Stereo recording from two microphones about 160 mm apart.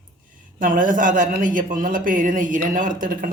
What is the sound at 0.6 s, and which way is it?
A man's voice, 55° right (ahead or behind).